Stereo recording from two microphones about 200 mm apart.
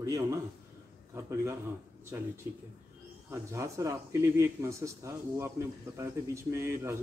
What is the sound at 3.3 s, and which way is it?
Speech, 15° right (ahead or behind).